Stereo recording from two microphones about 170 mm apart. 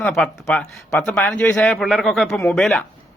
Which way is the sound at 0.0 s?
Centre (ahead or behind).